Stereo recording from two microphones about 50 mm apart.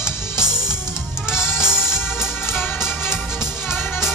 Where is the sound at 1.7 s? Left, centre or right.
Left.